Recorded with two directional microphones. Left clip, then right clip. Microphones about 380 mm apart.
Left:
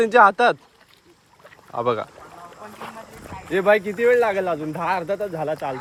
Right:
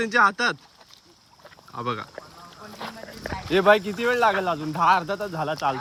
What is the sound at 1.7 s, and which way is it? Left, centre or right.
Speech, centre.